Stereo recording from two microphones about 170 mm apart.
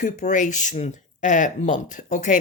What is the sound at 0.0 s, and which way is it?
Speech, 45° left (ahead or behind).